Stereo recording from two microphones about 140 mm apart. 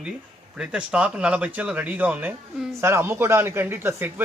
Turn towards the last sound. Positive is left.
turn(degrees=-15)  # may be behind; listen again after turning